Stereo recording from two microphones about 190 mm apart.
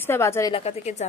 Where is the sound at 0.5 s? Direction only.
35° left (ahead or behind).